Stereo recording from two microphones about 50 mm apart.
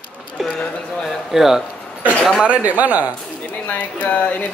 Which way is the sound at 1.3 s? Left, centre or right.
Centre.